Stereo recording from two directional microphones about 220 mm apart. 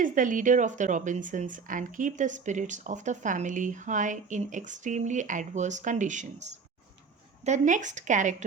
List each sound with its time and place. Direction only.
0.0 s a woman's voice: 35° right (ahead or behind)